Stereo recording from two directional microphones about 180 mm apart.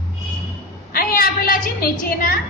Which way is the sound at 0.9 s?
50° left (ahead or behind).